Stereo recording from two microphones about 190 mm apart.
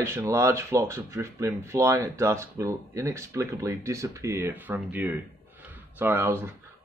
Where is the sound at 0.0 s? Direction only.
15° right (ahead or behind).